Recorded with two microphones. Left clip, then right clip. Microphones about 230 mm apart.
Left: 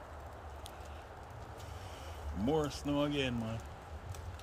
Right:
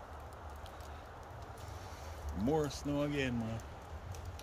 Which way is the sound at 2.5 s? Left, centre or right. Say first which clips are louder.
Left 1 dB; centre.